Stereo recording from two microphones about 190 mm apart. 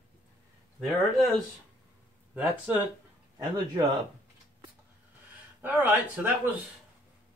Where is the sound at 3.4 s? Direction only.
20° right (ahead or behind).